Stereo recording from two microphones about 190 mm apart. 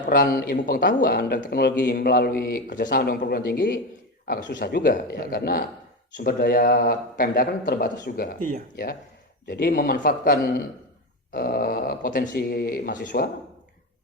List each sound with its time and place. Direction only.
0.0 s a man's voice: 50° left (ahead or behind)